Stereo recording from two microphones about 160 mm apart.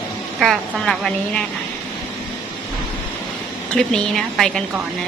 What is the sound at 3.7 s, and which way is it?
Speech, 5° left (ahead or behind).